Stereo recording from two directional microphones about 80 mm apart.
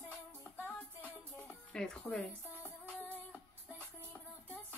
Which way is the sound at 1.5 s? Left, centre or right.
Centre.